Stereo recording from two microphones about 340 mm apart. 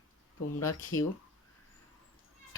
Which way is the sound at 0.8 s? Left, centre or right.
Left.